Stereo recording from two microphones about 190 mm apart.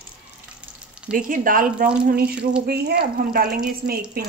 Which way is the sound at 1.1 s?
45° right (ahead or behind).